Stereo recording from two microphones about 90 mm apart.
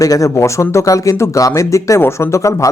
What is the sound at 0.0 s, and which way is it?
Speech, 40° left (ahead or behind).